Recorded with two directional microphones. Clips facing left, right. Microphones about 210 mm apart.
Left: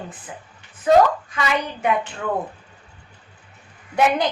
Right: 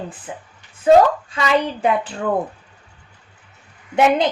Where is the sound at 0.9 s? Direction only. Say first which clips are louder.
Right 3 dB; 25° right (ahead or behind).